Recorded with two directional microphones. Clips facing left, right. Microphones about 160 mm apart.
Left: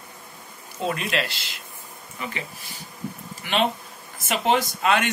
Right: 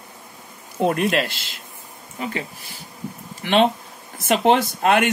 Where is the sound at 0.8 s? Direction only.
55° right (ahead or behind).